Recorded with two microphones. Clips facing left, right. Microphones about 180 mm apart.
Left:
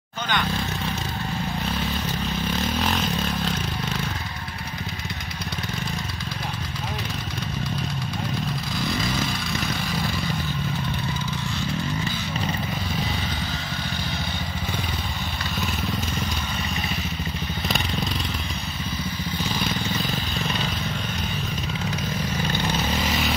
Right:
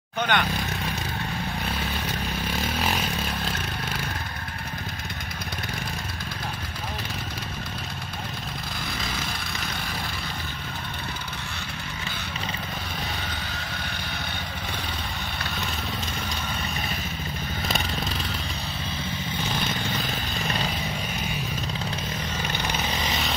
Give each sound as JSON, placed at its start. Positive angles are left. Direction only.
{"t": 0.3, "sound": "speech", "side_deg": -60}
{"t": 2.5, "sound": "vehicle", "side_deg": -10}
{"t": 22.8, "sound": "vehicle", "side_deg": 0}